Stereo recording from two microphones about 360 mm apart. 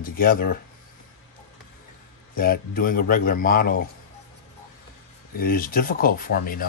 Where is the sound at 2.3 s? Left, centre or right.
Left.